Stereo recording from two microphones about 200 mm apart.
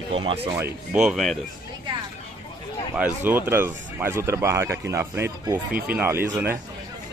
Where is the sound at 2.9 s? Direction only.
10° right (ahead or behind).